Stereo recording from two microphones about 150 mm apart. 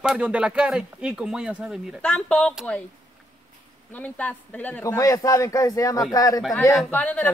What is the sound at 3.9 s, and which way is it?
Speech, 10° left (ahead or behind).